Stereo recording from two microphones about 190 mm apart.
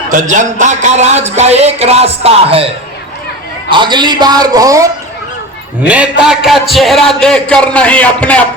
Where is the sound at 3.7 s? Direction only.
25° right (ahead or behind).